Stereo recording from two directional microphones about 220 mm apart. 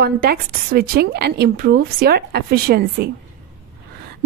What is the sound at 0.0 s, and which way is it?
A woman's voice, 45° right (ahead or behind).